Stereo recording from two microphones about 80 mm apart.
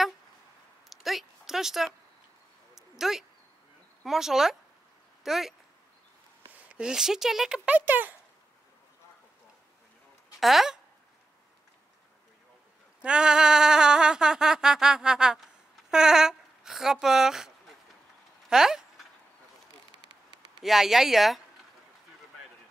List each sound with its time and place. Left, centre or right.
0.8 s a sound: centre
4.0 s speech: centre
6.5 s speech: centre
7.7 s speech: right
10.4 s speech: centre
13.0 s bleat: centre
15.9 s speech: centre
18.5 s a sound: centre
20.6 s speech: centre